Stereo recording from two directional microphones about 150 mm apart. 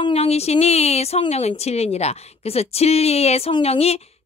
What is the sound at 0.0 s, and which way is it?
A woman's voice, 40° left (ahead or behind).